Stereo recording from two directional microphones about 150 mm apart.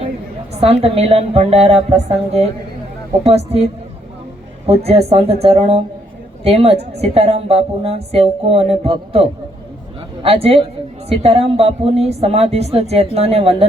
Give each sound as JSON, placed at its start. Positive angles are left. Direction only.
{"t": 0.5, "sound": "a woman's voice", "side_deg": -45}
{"t": 4.9, "sound": "a woman's voice", "side_deg": -45}
{"t": 10.2, "sound": "a woman's voice", "side_deg": -40}